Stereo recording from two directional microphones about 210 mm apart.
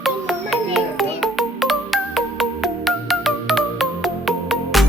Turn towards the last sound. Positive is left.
turn(degrees=0)  # may be behind; listen again after turning